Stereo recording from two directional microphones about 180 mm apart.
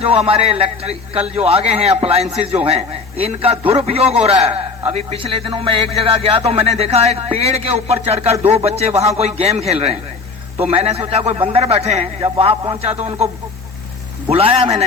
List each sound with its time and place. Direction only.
0.0 s a man's voice: 35° right (ahead or behind)
14.3 s a man's voice: 35° right (ahead or behind)